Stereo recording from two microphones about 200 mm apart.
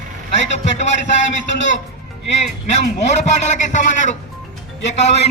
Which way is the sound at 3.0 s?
35° left (ahead or behind).